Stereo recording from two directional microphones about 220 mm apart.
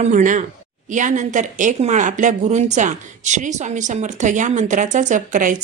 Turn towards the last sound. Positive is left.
turn(degrees=-35)  # may be behind; listen again after turning